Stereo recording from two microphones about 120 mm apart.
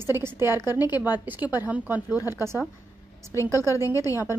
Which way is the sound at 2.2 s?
30° left (ahead or behind).